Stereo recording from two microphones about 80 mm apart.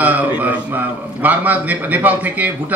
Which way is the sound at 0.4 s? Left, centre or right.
Right.